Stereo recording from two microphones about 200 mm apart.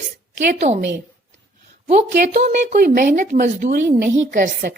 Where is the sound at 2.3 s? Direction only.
35° right (ahead or behind).